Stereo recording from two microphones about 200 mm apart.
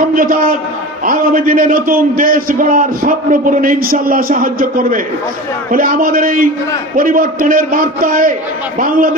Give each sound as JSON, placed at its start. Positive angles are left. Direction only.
{"t": 0.1, "sound": "a man's voice", "side_deg": -45}